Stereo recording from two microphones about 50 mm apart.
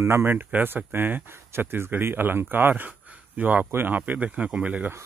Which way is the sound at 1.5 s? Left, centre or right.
Right.